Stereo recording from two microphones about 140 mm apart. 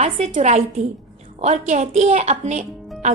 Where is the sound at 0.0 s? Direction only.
50° right (ahead or behind).